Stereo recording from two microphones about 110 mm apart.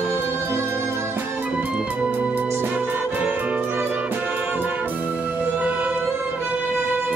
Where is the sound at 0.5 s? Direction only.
25° right (ahead or behind).